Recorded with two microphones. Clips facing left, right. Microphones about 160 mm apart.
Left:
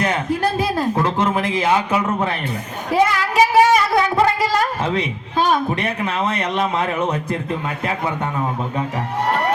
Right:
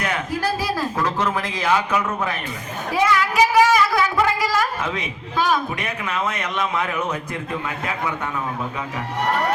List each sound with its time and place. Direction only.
0.8 s a man's voice: 25° left (ahead or behind)